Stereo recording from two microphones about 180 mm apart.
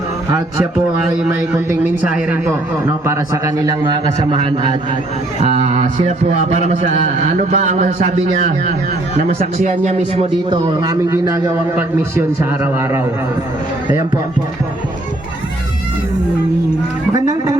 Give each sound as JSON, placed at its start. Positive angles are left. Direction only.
{"t": 1.1, "sound": "a man's voice", "side_deg": -5}
{"t": 5.4, "sound": "a man's voice", "side_deg": -40}
{"t": 9.1, "sound": "a man's voice", "side_deg": -40}
{"t": 10.5, "sound": "a man's voice", "side_deg": -20}
{"t": 17.2, "sound": "speech", "side_deg": -20}